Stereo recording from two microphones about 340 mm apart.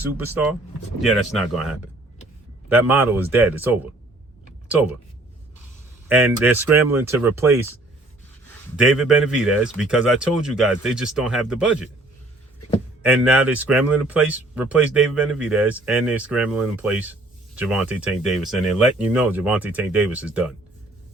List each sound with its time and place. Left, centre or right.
0.0 s speech: centre
6.1 s speech: centre
8.7 s speech: centre
13.0 s speech: centre